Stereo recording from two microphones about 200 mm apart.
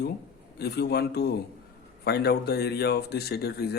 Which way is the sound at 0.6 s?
55° left (ahead or behind).